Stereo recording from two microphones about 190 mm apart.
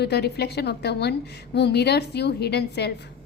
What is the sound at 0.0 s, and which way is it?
A woman's voice, 60° left (ahead or behind).